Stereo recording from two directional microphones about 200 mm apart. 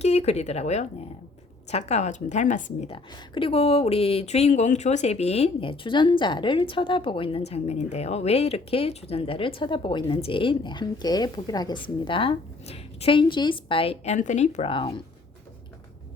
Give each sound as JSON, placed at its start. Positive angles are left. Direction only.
{"t": 0.0, "sound": "speech", "side_deg": 30}
{"t": 2.9, "sound": "speech", "side_deg": 25}